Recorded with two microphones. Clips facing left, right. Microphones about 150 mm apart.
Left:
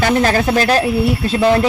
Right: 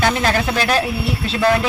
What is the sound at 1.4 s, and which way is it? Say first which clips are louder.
Speech: left 3 dB; 20° left (ahead or behind).